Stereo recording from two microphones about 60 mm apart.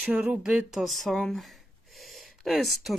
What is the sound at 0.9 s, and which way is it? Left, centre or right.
A woman's voice, centre.